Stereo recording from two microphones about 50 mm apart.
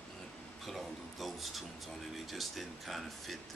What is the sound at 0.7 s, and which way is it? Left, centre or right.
Speech, centre.